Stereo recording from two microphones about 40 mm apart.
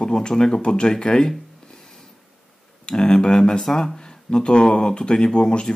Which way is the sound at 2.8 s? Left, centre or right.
Centre.